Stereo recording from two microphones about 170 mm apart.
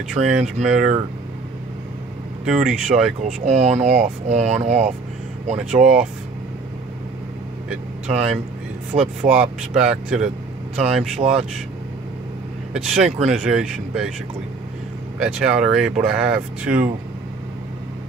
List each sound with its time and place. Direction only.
0.1 s speech: 5° right (ahead or behind)
2.4 s speech: 5° right (ahead or behind)
3.4 s speech: 40° right (ahead or behind)
5.6 s speech: 5° right (ahead or behind)
8.1 s speech: 5° right (ahead or behind)
8.9 s speech: 25° right (ahead or behind)
9.3 s speech: 5° right (ahead or behind)
12.7 s speech: 5° right (ahead or behind)
15.1 s speech: 5° right (ahead or behind)